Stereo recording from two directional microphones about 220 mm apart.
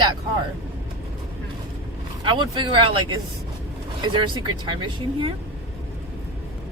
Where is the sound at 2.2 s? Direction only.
20° right (ahead or behind).